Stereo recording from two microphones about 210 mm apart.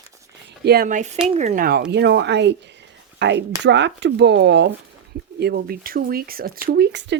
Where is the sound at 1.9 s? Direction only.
55° right (ahead or behind).